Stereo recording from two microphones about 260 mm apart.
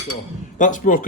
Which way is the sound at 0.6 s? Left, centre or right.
Left.